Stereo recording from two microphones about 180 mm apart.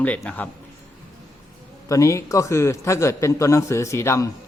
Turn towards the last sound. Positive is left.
turn(degrees=15)  # may be behind; listen again after turning